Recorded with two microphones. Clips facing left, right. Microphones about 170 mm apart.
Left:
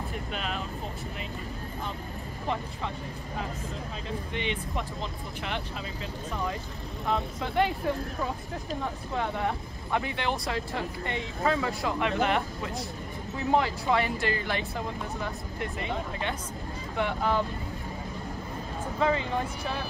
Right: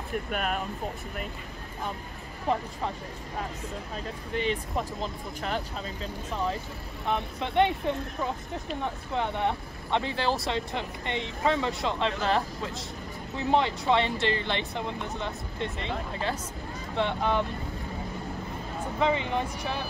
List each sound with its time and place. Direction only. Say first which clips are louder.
0.3 s speech: right 4 dB; 50° right (ahead or behind)
4.3 s speech: right 6 dB; 40° right (ahead or behind)
7.1 s speech: even; 20° right (ahead or behind)
9.1 s speech: right 2 dB; 20° right (ahead or behind)
16.9 s speech: right 1 dB; 25° right (ahead or behind)
18.9 s speech: even; 20° right (ahead or behind)